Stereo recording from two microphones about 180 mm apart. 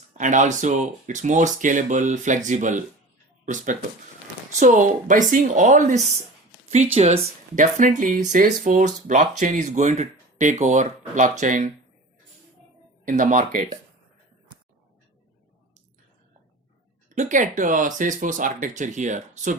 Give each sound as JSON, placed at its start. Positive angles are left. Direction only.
{"t": 0.1, "sound": "speech", "side_deg": -45}
{"t": 13.1, "sound": "speech", "side_deg": -50}
{"t": 17.2, "sound": "speech", "side_deg": -45}